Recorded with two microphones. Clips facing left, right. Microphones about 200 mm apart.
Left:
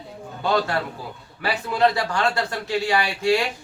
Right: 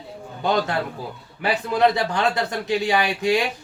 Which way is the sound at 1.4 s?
20° right (ahead or behind).